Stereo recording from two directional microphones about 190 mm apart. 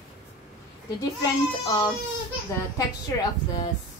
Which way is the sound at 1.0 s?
20° left (ahead or behind).